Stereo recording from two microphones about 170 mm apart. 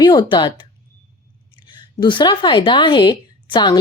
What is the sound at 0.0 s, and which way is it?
Speech, 25° left (ahead or behind).